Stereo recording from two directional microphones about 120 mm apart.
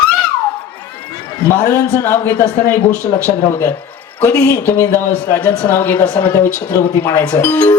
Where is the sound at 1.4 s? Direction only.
20° left (ahead or behind).